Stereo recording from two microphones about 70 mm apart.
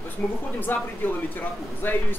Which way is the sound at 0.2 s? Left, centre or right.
Centre.